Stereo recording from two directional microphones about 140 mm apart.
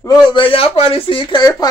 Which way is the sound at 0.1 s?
35° left (ahead or behind).